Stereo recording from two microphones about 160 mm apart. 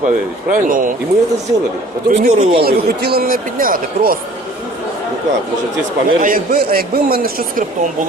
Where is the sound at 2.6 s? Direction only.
75° right (ahead or behind).